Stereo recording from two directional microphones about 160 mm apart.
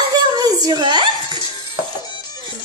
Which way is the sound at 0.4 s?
25° right (ahead or behind).